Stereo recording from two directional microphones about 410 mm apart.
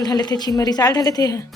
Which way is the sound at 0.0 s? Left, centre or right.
Centre.